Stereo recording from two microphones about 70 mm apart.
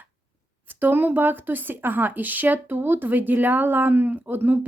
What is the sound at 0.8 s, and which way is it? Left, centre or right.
Speech, right.